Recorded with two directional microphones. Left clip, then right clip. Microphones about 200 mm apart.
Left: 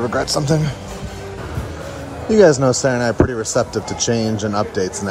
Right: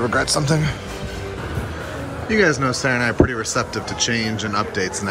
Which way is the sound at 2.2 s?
25° left (ahead or behind).